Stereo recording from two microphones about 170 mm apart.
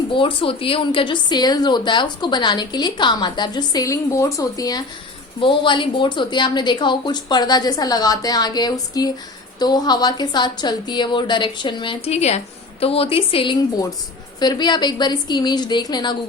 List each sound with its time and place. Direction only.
0.1 s a woman's voice: 30° left (ahead or behind)